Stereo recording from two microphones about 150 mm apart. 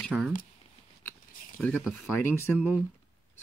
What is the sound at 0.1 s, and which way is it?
Speech, 5° right (ahead or behind).